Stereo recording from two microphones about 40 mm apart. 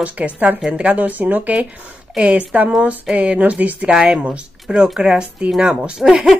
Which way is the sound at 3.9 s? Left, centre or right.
Centre.